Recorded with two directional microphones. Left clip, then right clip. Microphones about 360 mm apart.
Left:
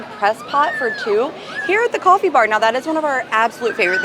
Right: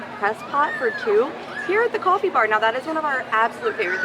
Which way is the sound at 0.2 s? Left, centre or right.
Centre.